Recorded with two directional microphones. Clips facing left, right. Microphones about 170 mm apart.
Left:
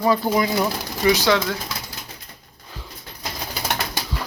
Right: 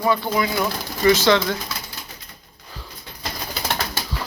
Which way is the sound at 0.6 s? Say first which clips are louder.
Even; 10° left (ahead or behind).